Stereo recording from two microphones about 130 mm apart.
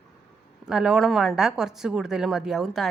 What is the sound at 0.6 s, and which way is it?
A woman's voice, 5° right (ahead or behind).